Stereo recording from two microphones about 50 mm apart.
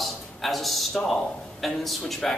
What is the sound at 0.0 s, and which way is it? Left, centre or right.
Speech, centre.